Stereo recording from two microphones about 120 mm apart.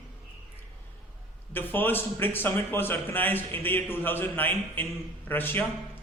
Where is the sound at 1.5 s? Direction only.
15° left (ahead or behind).